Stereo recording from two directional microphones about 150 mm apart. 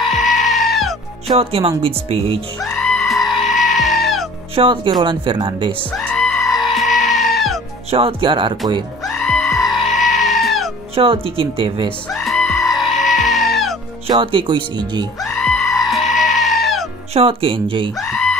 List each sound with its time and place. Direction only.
0.0 s music: centre (ahead or behind)
1.4 s speech: 40° right (ahead or behind)
2.6 s music: 5° left (ahead or behind)
4.6 s speech: 35° right (ahead or behind)
5.9 s goat: 5° left (ahead or behind)
7.9 s speech: 40° right (ahead or behind)
9.0 s goat: centre (ahead or behind)
11.0 s speech: 40° right (ahead or behind)
12.1 s music: centre (ahead or behind)
14.0 s speech: 35° right (ahead or behind)
15.1 s music: centre (ahead or behind)
15.7 s goat: centre (ahead or behind)
17.1 s speech: 40° right (ahead or behind)
17.9 s bleat: centre (ahead or behind)